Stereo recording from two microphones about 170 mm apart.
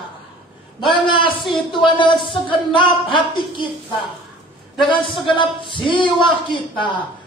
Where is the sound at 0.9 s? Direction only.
30° left (ahead or behind).